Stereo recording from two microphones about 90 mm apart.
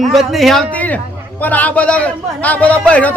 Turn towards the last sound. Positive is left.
turn(degrees=15)  # may be behind; listen again after turning